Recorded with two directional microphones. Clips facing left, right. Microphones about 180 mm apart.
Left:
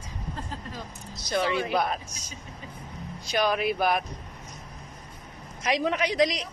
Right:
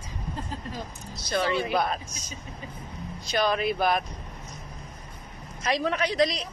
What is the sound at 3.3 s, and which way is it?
Speech, 10° left (ahead or behind).